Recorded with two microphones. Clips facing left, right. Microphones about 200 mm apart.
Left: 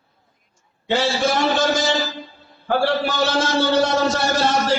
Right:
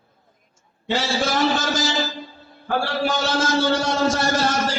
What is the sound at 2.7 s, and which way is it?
A man's voice, 60° left (ahead or behind).